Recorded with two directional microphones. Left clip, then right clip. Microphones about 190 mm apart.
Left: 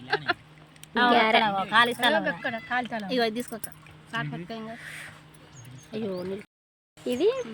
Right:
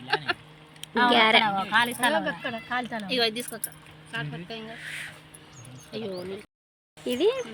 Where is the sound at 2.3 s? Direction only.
5° left (ahead or behind).